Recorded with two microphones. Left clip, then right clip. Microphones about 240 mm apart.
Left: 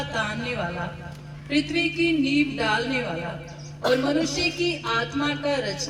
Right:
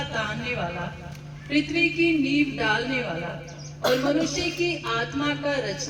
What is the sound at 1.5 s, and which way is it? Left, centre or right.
A man's voice, left.